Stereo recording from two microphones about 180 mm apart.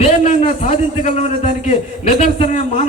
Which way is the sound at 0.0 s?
40° left (ahead or behind).